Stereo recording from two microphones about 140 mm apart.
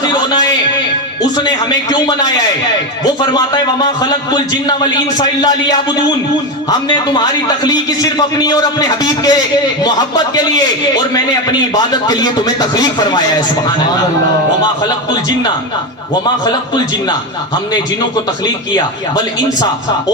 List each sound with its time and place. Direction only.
0.1 s a sound: 30° left (ahead or behind)
1.2 s a man's voice: 30° left (ahead or behind)
6.7 s a man's voice: 30° left (ahead or behind)
11.7 s a man's voice: 25° left (ahead or behind)
16.4 s a man's voice: 30° left (ahead or behind)